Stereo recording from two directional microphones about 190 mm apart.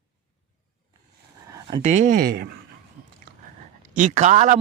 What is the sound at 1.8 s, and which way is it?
Speech, 40° right (ahead or behind).